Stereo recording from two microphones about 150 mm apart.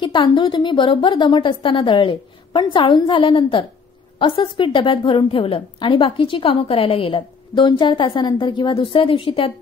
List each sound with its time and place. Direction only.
0.0 s a woman's voice: 30° left (ahead or behind)